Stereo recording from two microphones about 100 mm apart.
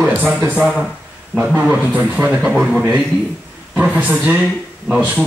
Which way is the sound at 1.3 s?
10° right (ahead or behind).